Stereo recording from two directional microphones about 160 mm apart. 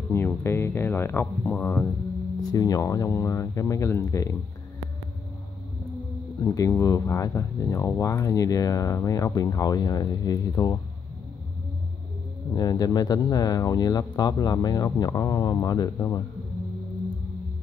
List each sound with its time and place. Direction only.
0.1 s speech: 15° left (ahead or behind)
6.4 s speech: 20° left (ahead or behind)
12.5 s speech: 25° left (ahead or behind)